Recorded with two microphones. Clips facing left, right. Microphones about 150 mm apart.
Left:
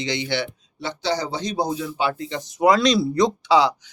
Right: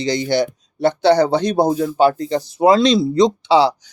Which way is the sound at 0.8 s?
60° right (ahead or behind).